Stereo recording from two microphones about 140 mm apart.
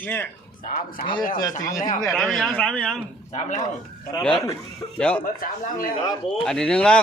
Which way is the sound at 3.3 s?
55° left (ahead or behind).